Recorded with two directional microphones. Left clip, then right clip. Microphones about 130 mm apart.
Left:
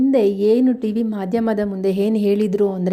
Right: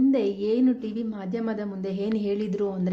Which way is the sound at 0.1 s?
60° left (ahead or behind).